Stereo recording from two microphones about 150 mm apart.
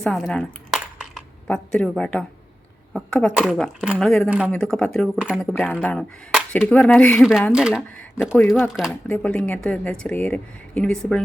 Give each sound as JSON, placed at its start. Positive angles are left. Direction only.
{"t": 0.0, "sound": "speech", "side_deg": 5}
{"t": 4.3, "sound": "speech", "side_deg": -10}
{"t": 4.5, "sound": "speech", "side_deg": 5}
{"t": 8.9, "sound": "speech", "side_deg": 10}